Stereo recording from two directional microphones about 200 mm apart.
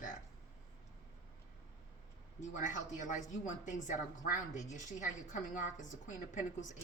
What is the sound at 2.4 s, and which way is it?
A woman's voice, 40° left (ahead or behind).